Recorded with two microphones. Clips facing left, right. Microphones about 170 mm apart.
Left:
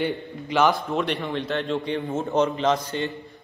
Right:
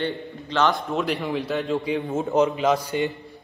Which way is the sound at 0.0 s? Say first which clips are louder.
Left 1 dB; 10° left (ahead or behind).